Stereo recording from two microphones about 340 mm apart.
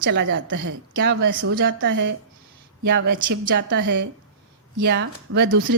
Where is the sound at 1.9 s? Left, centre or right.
Right.